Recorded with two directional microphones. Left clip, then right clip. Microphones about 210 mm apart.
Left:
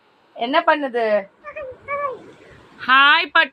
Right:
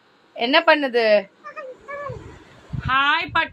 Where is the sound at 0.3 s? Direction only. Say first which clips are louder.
Right 1 dB; 10° right (ahead or behind).